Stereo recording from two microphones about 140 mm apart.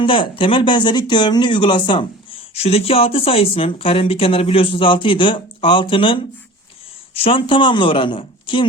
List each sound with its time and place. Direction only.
0.0 s speech: 40° left (ahead or behind)